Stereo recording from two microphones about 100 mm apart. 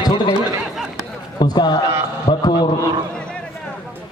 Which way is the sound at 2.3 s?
55° left (ahead or behind).